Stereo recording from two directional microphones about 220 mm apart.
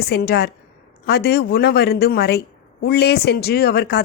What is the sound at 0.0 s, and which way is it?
A woman's voice, 45° left (ahead or behind).